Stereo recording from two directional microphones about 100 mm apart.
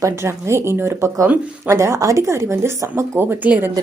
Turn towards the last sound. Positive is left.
turn(degrees=-20)  # may be behind; listen again after turning